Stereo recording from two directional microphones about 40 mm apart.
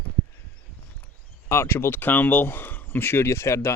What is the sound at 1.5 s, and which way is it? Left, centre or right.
Speech, left.